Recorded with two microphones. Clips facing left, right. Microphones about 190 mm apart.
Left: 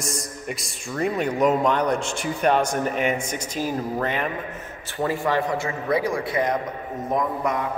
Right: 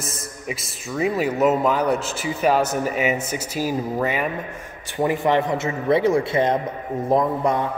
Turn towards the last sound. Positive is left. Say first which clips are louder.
# right 4 dB
turn(degrees=-30)  # may be behind; listen again after turning